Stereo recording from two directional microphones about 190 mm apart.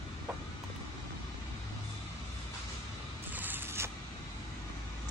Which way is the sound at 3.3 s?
10° right (ahead or behind).